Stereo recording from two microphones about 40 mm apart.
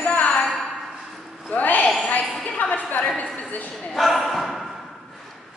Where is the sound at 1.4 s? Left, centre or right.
Left.